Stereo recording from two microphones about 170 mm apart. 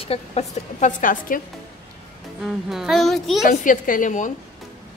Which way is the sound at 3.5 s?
50° left (ahead or behind).